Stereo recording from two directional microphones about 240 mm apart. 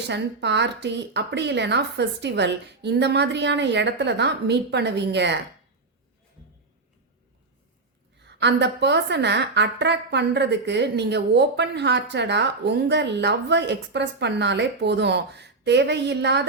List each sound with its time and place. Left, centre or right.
0.1 s a woman's voice: right
8.2 s a woman's voice: right